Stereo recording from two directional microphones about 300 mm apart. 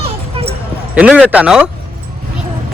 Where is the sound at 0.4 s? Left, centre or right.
Centre.